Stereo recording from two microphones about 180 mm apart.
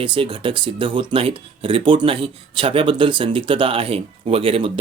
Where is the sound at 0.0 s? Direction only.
25° right (ahead or behind).